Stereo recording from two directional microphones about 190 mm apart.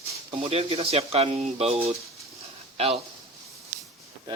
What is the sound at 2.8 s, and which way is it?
Speech, 30° right (ahead or behind).